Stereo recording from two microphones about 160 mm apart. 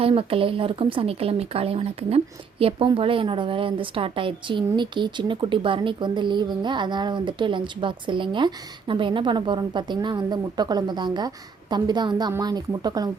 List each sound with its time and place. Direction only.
0.0 s speech: 35° right (ahead or behind)